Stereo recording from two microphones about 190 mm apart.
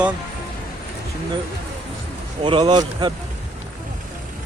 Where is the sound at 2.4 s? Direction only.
25° right (ahead or behind).